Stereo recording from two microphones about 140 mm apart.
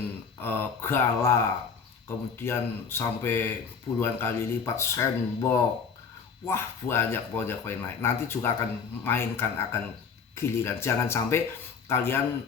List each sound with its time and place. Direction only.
0.3 s speech: 15° left (ahead or behind)